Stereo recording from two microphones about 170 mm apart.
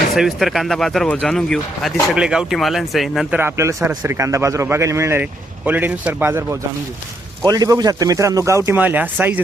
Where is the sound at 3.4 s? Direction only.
15° right (ahead or behind).